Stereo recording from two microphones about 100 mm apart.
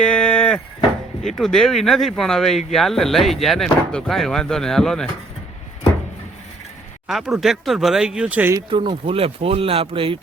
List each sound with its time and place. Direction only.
0.0 s vehicle: 10° left (ahead or behind)
1.4 s speech: 5° left (ahead or behind)
7.1 s speech: centre (ahead or behind)
8.7 s speech: 55° right (ahead or behind)